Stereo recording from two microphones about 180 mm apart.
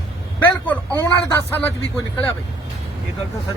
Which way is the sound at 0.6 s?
10° left (ahead or behind).